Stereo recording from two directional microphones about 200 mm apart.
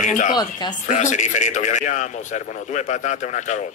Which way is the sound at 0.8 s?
35° left (ahead or behind).